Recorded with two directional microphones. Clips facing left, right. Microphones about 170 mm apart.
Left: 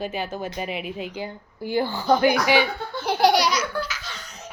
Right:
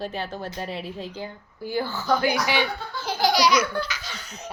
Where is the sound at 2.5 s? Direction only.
60° left (ahead or behind).